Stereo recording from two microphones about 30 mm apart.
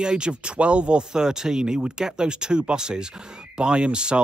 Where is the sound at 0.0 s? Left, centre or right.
Right.